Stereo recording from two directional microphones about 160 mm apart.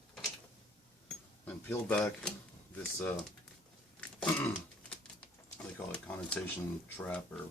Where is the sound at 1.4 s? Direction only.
10° left (ahead or behind).